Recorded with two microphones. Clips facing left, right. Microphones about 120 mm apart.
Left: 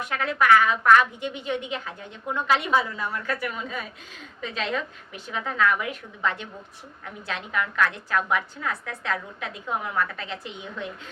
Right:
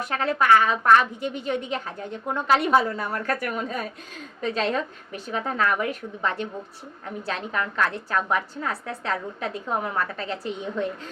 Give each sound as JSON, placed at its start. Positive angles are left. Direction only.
{"t": 0.0, "sound": "a woman's voice", "side_deg": -35}